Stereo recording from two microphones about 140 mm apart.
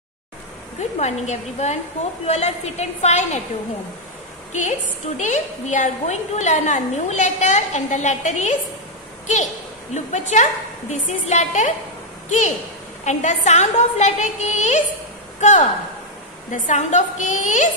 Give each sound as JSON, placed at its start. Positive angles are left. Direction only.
{"t": 0.7, "sound": "a woman's voice", "side_deg": 55}
{"t": 4.5, "sound": "a woman's voice", "side_deg": 60}
{"t": 10.3, "sound": "a woman's voice", "side_deg": 55}